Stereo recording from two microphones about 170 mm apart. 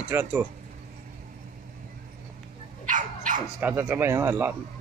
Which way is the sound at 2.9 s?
50° right (ahead or behind).